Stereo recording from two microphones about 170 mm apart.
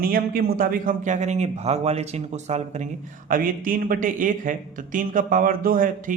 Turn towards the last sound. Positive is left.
turn(degrees=-55)  # may be behind; listen again after turning